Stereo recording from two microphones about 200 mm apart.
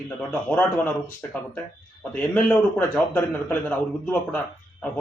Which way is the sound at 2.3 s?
5° left (ahead or behind).